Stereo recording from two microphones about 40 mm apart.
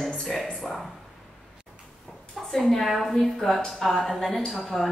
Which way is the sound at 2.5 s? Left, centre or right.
Centre.